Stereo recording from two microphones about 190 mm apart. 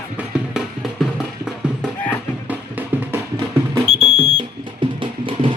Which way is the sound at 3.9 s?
30° right (ahead or behind).